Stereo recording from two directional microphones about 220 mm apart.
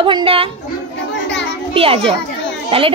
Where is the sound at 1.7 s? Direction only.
25° right (ahead or behind).